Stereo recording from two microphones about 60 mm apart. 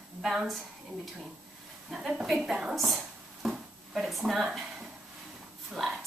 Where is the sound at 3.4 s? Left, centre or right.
Centre.